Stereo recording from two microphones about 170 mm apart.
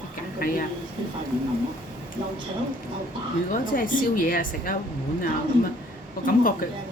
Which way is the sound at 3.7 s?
55° left (ahead or behind).